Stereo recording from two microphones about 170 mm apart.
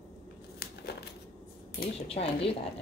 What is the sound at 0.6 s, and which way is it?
Crumpling, 70° left (ahead or behind).